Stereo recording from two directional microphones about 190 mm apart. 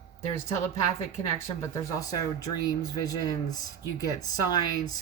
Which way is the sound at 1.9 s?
20° left (ahead or behind).